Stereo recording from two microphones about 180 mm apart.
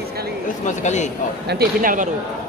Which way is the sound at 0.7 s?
40° left (ahead or behind).